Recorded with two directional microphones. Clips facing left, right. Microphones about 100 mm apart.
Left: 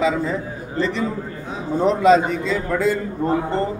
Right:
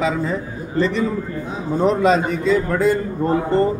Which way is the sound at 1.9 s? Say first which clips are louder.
Left 3 dB; 45° right (ahead or behind).